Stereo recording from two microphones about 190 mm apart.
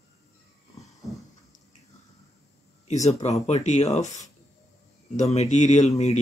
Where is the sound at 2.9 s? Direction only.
35° left (ahead or behind).